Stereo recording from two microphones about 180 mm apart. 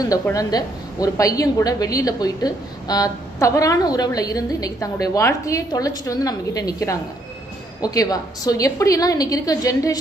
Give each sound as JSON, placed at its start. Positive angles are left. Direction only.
{"t": 0.0, "sound": "a woman's voice", "side_deg": 20}